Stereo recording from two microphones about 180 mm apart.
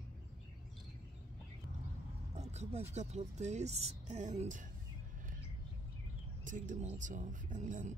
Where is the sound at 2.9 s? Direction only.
35° right (ahead or behind).